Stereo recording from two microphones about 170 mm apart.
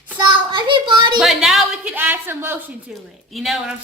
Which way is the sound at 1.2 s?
Centre (ahead or behind).